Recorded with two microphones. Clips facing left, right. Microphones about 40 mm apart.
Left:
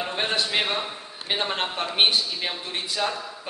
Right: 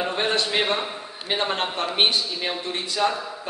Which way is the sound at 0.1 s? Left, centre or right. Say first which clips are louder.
Right 2 dB; centre.